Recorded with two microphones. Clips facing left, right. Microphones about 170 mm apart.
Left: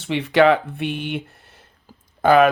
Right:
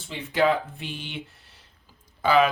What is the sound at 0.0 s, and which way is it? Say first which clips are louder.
Speech: left 8 dB; 75° left (ahead or behind).